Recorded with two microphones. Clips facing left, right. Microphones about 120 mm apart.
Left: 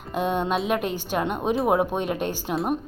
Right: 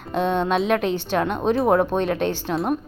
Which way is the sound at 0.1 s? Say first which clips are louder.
Right 3 dB; 10° left (ahead or behind).